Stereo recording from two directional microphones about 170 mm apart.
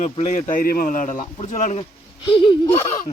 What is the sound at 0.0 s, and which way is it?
Speech, 40° left (ahead or behind).